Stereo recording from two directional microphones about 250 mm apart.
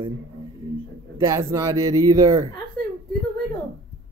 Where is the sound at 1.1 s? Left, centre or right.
Centre.